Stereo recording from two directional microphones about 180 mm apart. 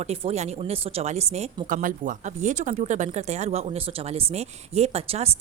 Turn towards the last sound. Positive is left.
turn(degrees=-35)  # may be behind; listen again after turning